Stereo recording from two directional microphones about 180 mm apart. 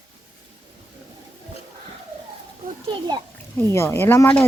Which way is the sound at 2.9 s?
25° right (ahead or behind).